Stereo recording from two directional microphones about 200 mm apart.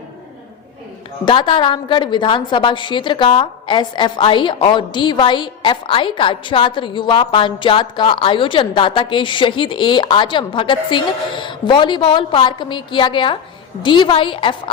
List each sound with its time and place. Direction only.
1.2 s a woman's voice: 25° left (ahead or behind)